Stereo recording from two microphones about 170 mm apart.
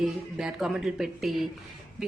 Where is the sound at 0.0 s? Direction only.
5° right (ahead or behind).